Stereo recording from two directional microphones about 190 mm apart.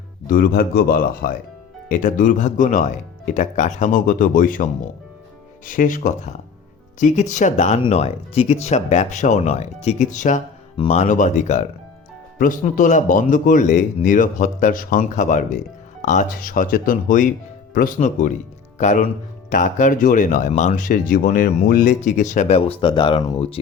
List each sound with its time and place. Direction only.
0.3 s speech: 50° left (ahead or behind); by 23.6 s 30° left (ahead or behind)